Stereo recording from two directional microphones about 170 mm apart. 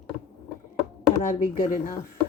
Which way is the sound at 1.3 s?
55° left (ahead or behind).